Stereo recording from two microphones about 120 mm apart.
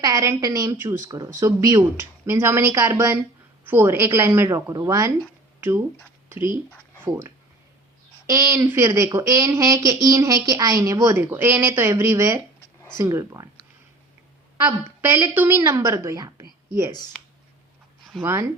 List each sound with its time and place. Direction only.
0.0 s speech: 30° right (ahead or behind)
7.0 s speech: 25° right (ahead or behind)
14.7 s speech: 15° right (ahead or behind)